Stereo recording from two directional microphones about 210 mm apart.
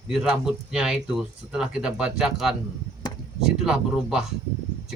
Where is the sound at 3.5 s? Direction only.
Centre (ahead or behind).